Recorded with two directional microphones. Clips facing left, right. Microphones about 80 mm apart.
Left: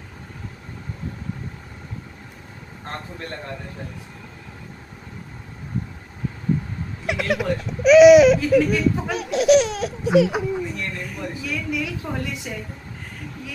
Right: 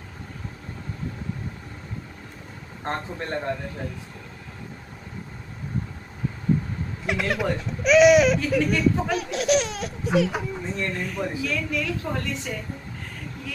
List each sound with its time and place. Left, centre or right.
2.8 s speech: right
7.1 s speech: centre
10.7 s speech: right
11.4 s a woman's voice: centre